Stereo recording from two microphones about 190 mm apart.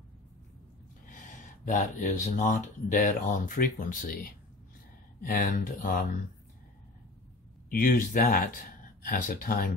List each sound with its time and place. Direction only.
1.0 s speech: 45° left (ahead or behind)
7.7 s speech: 45° left (ahead or behind)